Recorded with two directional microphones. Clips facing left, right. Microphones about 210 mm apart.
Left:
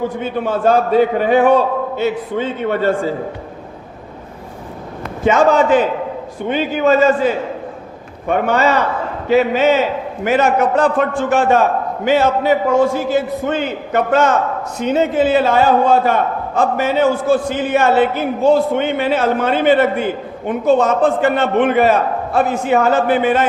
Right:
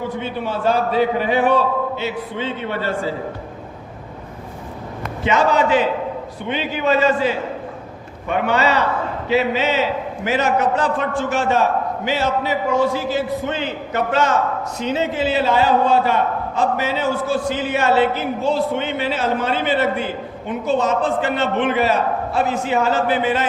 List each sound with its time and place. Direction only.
0.2 s a man's voice: 50° left (ahead or behind)
5.2 s a man's voice: 45° left (ahead or behind)